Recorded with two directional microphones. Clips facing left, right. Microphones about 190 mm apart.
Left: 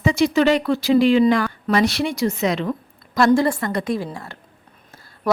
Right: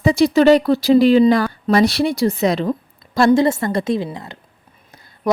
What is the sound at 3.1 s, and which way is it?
A woman's voice, 25° right (ahead or behind).